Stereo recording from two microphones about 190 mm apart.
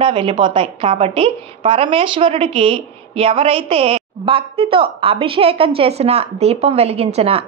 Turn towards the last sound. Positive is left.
turn(degrees=-30)  # may be behind; listen again after turning